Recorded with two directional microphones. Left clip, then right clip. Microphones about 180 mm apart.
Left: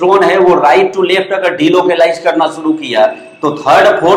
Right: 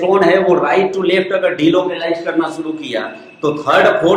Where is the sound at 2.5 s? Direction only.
35° left (ahead or behind).